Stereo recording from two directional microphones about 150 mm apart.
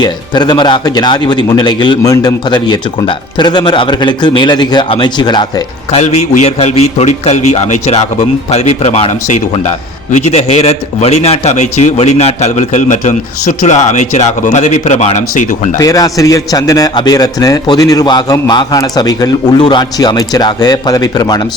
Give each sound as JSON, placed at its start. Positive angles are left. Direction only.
{"t": 0.0, "sound": "a man's voice", "side_deg": 30}
{"t": 5.9, "sound": "a man's voice", "side_deg": 45}
{"t": 15.8, "sound": "a man's voice", "side_deg": 25}